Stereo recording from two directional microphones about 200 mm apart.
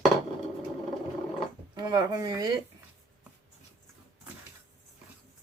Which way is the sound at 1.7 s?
20° right (ahead or behind).